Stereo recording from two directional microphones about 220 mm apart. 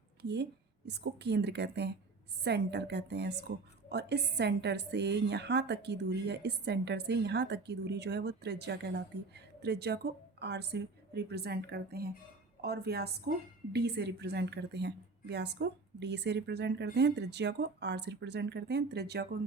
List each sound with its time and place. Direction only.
0.2 s a woman's voice: 50° right (ahead or behind)